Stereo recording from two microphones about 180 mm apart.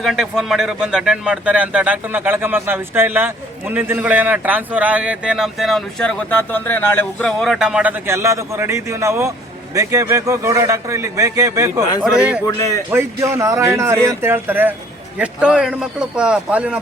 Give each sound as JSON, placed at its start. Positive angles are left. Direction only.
{"t": 0.0, "sound": "speech", "side_deg": 0}
{"t": 12.5, "sound": "a man's voice", "side_deg": 20}
{"t": 12.9, "sound": "a man's voice", "side_deg": -15}